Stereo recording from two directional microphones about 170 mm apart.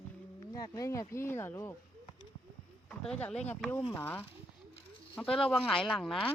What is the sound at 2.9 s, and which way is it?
Speech, 5° left (ahead or behind).